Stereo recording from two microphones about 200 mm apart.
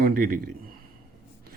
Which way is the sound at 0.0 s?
45° right (ahead or behind).